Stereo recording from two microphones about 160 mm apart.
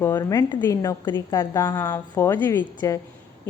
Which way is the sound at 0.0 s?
20° left (ahead or behind).